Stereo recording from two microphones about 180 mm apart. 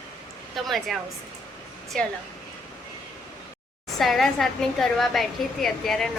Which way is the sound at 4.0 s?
Centre (ahead or behind).